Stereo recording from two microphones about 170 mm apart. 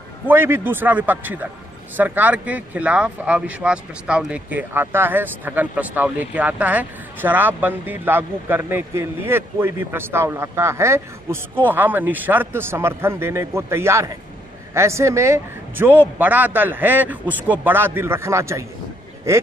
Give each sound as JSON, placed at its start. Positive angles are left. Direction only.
{"t": 0.3, "sound": "speech", "side_deg": -15}